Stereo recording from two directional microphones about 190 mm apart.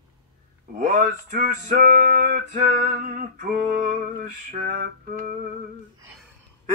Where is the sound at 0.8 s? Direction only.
40° right (ahead or behind).